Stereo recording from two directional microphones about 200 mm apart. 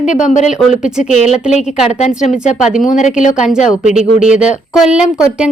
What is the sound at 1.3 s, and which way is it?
Speech, centre (ahead or behind).